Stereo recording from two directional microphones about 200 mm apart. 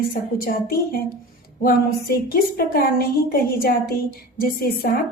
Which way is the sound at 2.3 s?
45° left (ahead or behind).